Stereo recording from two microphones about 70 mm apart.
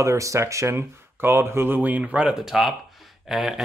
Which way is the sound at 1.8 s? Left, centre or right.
Right.